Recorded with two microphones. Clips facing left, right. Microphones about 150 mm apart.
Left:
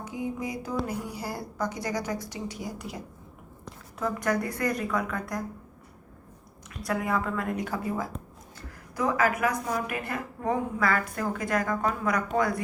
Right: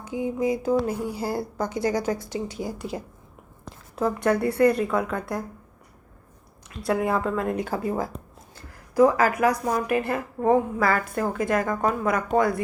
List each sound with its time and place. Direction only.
0.0 s a woman's voice: 25° right (ahead or behind)
6.7 s a woman's voice: 25° right (ahead or behind)